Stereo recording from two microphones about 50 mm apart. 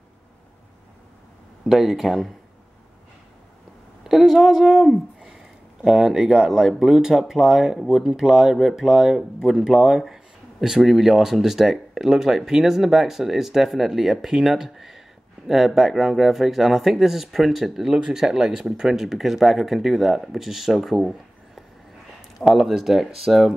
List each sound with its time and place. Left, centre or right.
1.7 s speech: centre
4.0 s a woman's voice: centre
5.8 s speech: centre
17.9 s speech: centre
18.2 s speech: centre